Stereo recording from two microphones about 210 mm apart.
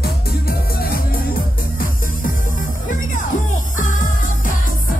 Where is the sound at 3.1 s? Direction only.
40° left (ahead or behind).